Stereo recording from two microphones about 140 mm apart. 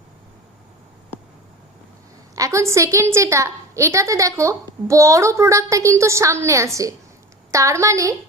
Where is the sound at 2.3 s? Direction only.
20° right (ahead or behind).